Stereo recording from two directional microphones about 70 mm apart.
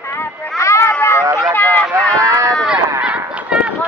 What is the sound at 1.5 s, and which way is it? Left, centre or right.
Run, left.